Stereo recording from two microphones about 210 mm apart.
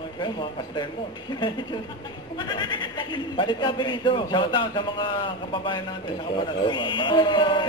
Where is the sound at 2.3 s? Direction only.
20° left (ahead or behind).